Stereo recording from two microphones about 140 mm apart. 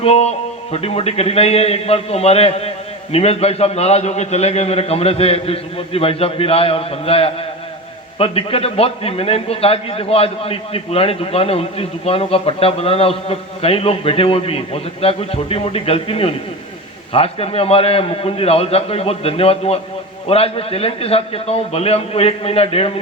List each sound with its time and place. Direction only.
0.0 s a man's voice: 50° left (ahead or behind)